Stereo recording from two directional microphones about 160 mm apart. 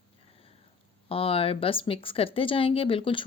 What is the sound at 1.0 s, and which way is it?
Speech, 35° left (ahead or behind).